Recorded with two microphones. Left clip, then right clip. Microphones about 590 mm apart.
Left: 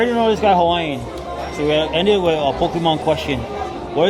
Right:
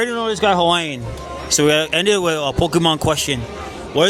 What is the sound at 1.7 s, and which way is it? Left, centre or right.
Speech, right.